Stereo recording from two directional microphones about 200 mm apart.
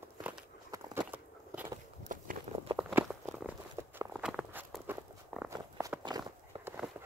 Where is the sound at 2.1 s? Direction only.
40° right (ahead or behind).